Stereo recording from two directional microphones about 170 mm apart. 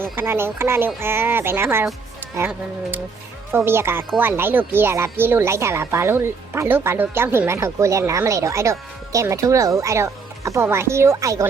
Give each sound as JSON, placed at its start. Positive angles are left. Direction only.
{"t": 0.0, "sound": "speech", "side_deg": -15}